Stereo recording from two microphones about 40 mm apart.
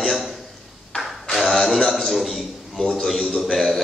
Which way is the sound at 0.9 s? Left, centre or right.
Left.